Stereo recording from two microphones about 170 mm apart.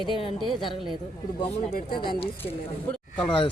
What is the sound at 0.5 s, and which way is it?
Speech, 25° left (ahead or behind).